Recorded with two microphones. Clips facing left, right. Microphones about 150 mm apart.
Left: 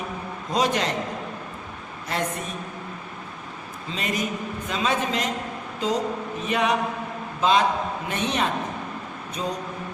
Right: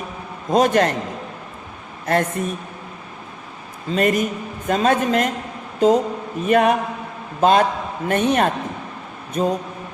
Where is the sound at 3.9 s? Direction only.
55° right (ahead or behind).